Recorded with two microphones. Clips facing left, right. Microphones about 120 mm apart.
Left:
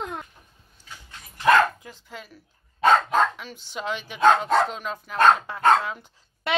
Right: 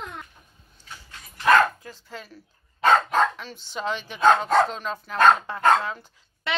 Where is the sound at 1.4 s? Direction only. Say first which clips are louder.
Even; 15° left (ahead or behind).